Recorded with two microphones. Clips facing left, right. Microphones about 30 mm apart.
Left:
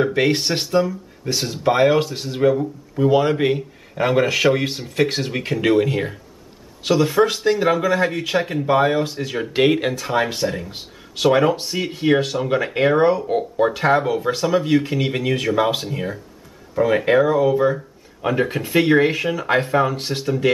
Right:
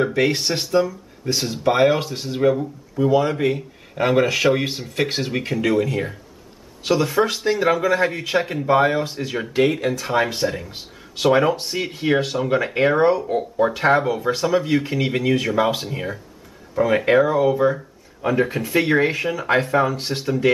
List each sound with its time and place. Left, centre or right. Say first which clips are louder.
0.2 s speech: left 1 dB; centre
1.2 s speech: even; centre
3.2 s speech: left 2 dB; left
3.9 s speech: even; centre
5.6 s speech: left 3 dB; left
7.2 s speech: left 2 dB; centre
9.5 s speech: left 2 dB; left
9.9 s speech: even; centre
13.3 s speech: left 1 dB; centre
13.7 s speech: even; centre
18.2 s speech: even; centre
18.9 s speech: left 2 dB; centre